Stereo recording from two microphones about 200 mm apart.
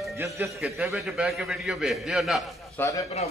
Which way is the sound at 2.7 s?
15° left (ahead or behind).